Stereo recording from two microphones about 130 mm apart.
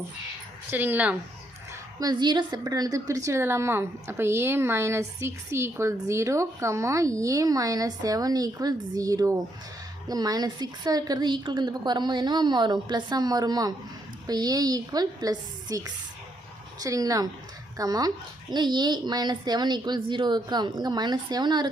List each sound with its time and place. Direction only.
0.7 s speech: 15° right (ahead or behind)
2.0 s a woman's voice: 35° right (ahead or behind)